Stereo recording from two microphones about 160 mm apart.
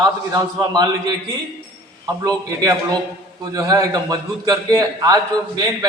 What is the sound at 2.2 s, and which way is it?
A man's voice, 20° right (ahead or behind).